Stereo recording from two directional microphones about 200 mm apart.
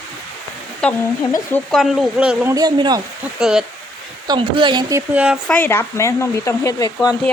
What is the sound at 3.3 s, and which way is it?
Speech, 5° right (ahead or behind).